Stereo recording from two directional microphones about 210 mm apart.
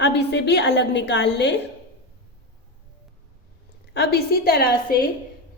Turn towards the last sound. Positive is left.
turn(degrees=45)  # may be behind; listen again after turning